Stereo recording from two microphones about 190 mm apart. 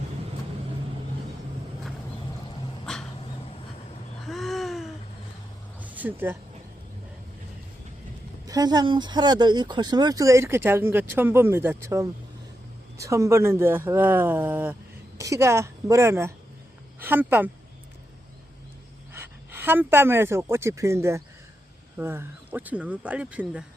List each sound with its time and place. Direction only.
4.3 s a sound: centre (ahead or behind)
8.4 s speech: 20° right (ahead or behind)
19.1 s speech: 10° right (ahead or behind)